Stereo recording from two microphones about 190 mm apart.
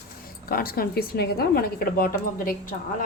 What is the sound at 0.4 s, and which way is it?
A woman's voice, 50° left (ahead or behind).